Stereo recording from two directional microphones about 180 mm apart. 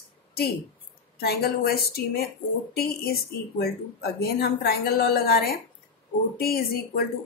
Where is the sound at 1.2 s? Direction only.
60° left (ahead or behind).